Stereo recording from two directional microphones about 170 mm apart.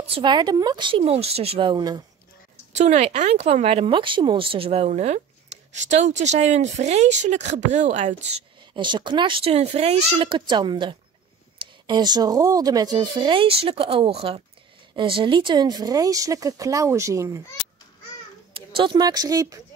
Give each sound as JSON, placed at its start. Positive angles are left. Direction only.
{"t": 0.0, "sound": "speech", "side_deg": -30}
{"t": 2.8, "sound": "speech", "side_deg": -40}
{"t": 8.7, "sound": "speech", "side_deg": -25}
{"t": 18.8, "sound": "speech", "side_deg": -25}